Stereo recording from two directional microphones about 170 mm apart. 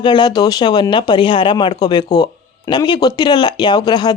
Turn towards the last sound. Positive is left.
turn(degrees=25)  # may be behind; listen again after turning